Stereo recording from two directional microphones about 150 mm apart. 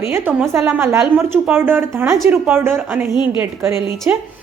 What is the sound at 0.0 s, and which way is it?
A woman's voice, 15° right (ahead or behind).